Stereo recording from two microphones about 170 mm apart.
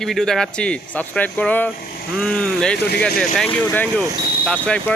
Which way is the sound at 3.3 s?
5° left (ahead or behind).